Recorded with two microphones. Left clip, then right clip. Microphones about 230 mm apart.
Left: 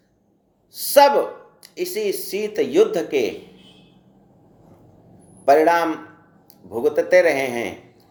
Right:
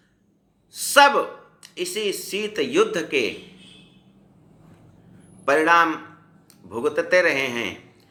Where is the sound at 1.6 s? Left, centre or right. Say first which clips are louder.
Left 2 dB; right.